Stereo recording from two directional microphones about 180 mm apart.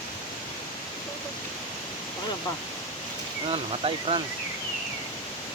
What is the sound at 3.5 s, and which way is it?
Speech, 30° right (ahead or behind).